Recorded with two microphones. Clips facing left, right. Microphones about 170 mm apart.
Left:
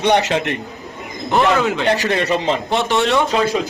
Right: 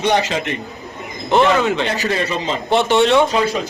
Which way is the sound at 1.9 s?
70° left (ahead or behind).